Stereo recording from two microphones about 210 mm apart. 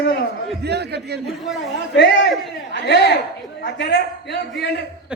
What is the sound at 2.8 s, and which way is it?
A man's voice, 55° left (ahead or behind).